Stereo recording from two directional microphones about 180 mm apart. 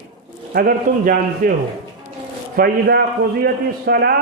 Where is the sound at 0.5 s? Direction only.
55° right (ahead or behind).